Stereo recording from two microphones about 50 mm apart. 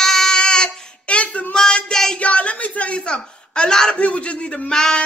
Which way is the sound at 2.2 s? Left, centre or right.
Left.